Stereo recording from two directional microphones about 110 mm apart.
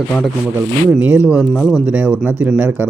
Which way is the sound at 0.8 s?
15° right (ahead or behind).